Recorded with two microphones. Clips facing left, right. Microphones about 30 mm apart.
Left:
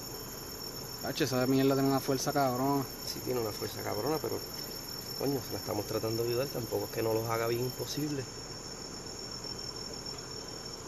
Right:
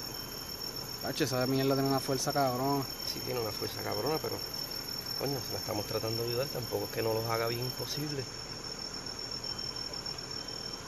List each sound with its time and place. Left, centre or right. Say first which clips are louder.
1.0 s speech: left 1 dB; centre
3.3 s speech: left 2 dB; centre
6.7 s speech: left 1 dB; centre